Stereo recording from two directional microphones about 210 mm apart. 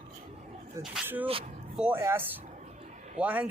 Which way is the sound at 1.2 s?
25° right (ahead or behind).